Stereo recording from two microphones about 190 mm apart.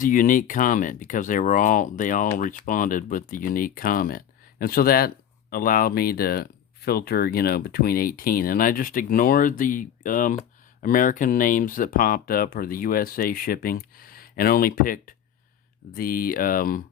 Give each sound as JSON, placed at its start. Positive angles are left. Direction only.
{"t": 0.0, "sound": "speech", "side_deg": 45}